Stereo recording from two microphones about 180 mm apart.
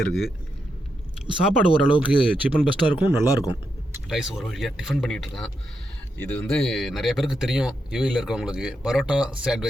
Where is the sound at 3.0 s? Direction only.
10° right (ahead or behind).